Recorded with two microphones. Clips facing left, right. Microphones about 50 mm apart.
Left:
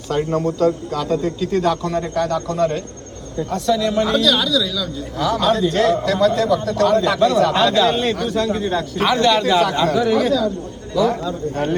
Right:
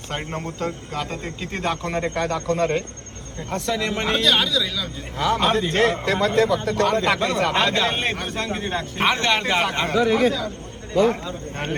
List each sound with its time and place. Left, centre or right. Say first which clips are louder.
0.1 s a man's voice: left 10 dB; right
9.9 s speech: left 2 dB; right
10.9 s a man's voice: left 1 dB; right